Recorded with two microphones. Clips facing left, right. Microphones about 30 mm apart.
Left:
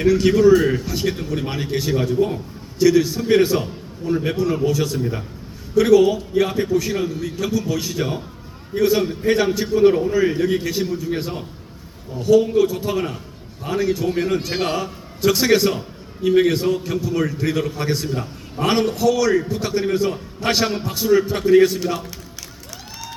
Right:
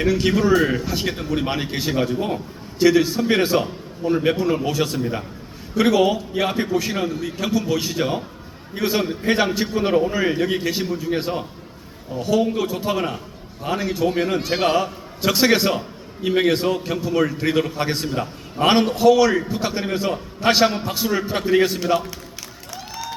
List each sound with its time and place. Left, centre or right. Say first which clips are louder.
0.0 s a man's voice: left 4 dB; centre